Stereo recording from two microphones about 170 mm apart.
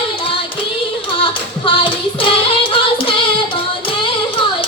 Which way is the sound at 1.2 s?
30° left (ahead or behind).